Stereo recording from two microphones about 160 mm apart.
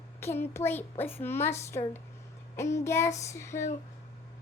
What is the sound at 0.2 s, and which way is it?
A child's voice, 15° left (ahead or behind).